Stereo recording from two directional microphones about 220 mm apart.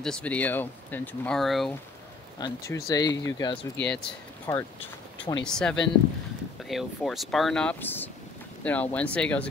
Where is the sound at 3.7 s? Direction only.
5° left (ahead or behind).